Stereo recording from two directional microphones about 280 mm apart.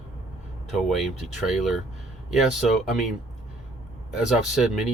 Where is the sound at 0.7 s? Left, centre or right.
Centre.